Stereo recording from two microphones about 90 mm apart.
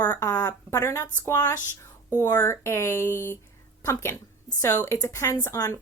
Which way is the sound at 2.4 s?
30° left (ahead or behind).